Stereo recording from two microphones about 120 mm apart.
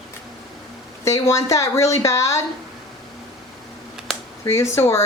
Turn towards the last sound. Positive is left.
turn(degrees=25)  # may be behind; listen again after turning